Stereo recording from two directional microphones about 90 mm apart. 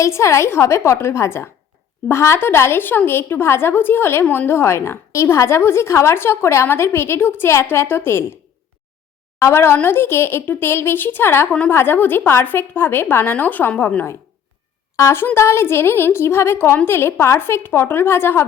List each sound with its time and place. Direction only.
0.0 s a woman's voice: 35° left (ahead or behind)
9.4 s a woman's voice: 30° left (ahead or behind)